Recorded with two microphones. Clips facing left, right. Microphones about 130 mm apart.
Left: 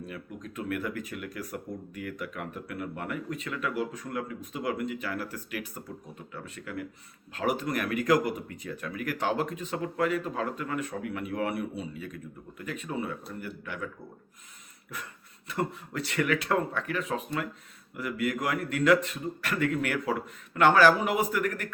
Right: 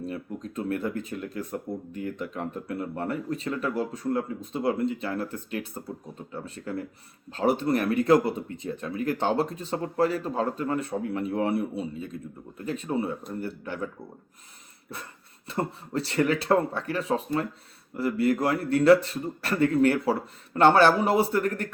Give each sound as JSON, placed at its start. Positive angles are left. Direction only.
{"t": 0.0, "sound": "speech", "side_deg": -30}
{"t": 15.4, "sound": "speech", "side_deg": -30}